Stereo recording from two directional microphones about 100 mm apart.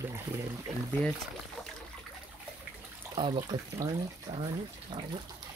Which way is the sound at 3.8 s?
35° right (ahead or behind).